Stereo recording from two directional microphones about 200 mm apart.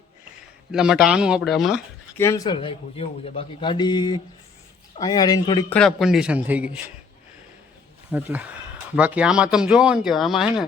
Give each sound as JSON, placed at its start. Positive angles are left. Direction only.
{"t": 0.7, "sound": "speech", "side_deg": -5}
{"t": 2.1, "sound": "a man's voice", "side_deg": 15}
{"t": 5.7, "sound": "speech", "side_deg": 0}
{"t": 8.1, "sound": "speech", "side_deg": -5}